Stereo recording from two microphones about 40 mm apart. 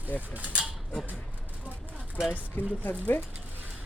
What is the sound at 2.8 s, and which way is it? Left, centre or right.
Speech, left.